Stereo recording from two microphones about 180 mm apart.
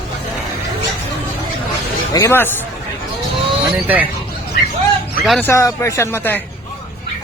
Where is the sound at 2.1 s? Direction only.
15° left (ahead or behind).